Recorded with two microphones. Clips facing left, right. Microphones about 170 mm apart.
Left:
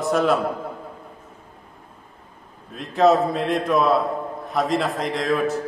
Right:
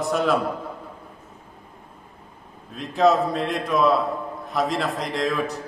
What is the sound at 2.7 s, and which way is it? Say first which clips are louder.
A man's voice: left 2 dB; centre (ahead or behind).